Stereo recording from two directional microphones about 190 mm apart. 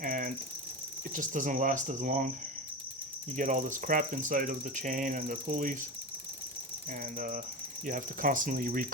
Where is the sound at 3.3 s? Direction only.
40° right (ahead or behind).